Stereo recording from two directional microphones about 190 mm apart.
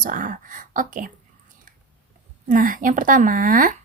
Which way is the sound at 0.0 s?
45° right (ahead or behind).